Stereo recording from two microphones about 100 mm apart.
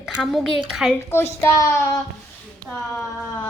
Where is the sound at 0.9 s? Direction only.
25° left (ahead or behind).